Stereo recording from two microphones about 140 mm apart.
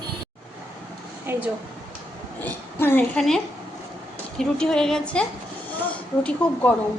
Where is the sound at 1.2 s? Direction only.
15° right (ahead or behind).